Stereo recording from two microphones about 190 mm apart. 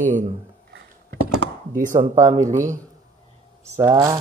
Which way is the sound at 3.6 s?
15° right (ahead or behind).